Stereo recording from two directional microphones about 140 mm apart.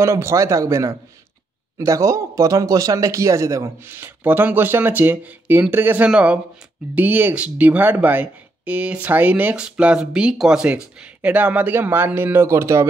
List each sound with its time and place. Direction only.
0.0 s speech: 20° right (ahead or behind)